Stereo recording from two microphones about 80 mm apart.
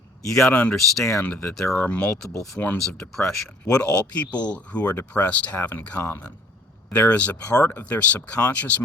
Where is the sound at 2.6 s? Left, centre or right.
Left.